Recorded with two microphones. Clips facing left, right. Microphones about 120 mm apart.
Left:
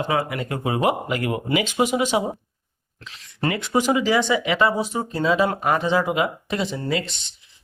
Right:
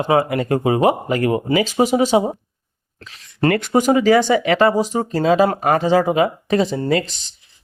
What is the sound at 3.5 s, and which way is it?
Speech, 55° right (ahead or behind).